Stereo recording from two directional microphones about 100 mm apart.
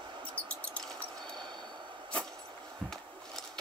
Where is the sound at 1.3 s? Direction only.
50° right (ahead or behind).